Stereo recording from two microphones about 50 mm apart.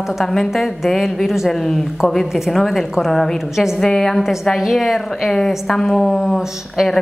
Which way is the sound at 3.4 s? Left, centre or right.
Centre.